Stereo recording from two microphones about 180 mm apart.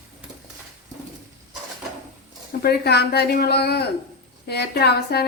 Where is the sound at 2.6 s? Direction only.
60° left (ahead or behind).